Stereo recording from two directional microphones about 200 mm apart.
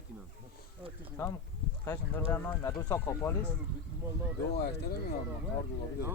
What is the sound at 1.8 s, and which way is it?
Speech, 15° left (ahead or behind).